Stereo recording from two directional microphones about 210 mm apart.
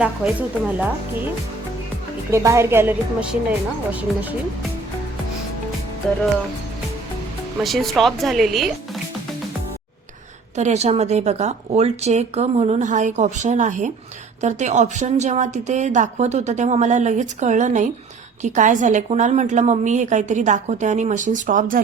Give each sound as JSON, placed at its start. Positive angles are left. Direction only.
{"t": 0.0, "sound": "a woman's voice", "side_deg": -5}
{"t": 2.3, "sound": "a woman's voice", "side_deg": -15}
{"t": 6.0, "sound": "a woman's voice", "side_deg": 5}
{"t": 7.6, "sound": "a woman's voice", "side_deg": 0}
{"t": 10.5, "sound": "a woman's voice", "side_deg": -35}